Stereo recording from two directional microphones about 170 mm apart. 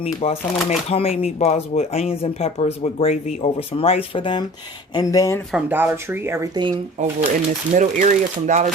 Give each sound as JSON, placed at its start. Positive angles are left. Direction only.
{"t": 0.0, "sound": "speech", "side_deg": 40}
{"t": 5.5, "sound": "speech", "side_deg": -5}
{"t": 7.0, "sound": "speech", "side_deg": -45}